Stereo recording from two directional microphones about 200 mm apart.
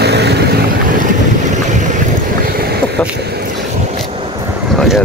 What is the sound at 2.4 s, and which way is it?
Boat, 50° right (ahead or behind).